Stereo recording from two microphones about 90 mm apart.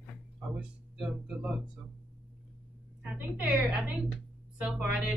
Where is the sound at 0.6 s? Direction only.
10° right (ahead or behind).